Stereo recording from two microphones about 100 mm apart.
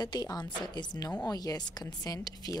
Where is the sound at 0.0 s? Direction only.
40° left (ahead or behind).